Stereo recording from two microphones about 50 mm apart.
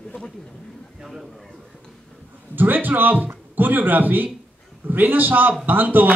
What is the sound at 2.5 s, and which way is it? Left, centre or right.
A man's voice, right.